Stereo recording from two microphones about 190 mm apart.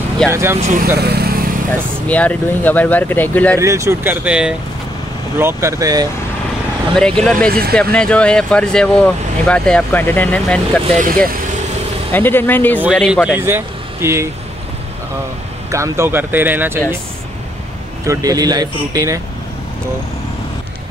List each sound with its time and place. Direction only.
0.3 s speech: 15° right (ahead or behind)
0.6 s speech: 40° right (ahead or behind)
0.9 s speech: 55° right (ahead or behind)
2.0 s speech: 5° left (ahead or behind)
3.5 s speech: 15° right (ahead or behind)
7.0 s speech: 5° left (ahead or behind)
12.1 s speech: 10° left (ahead or behind)
12.8 s speech: centre (ahead or behind)
13.3 s speech: 10° right (ahead or behind)
15.7 s speech: 15° right (ahead or behind)
18.0 s speech: 15° right (ahead or behind)